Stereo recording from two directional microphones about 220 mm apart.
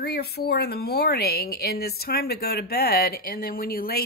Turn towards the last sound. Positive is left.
turn(degrees=45)  # may be behind; listen again after turning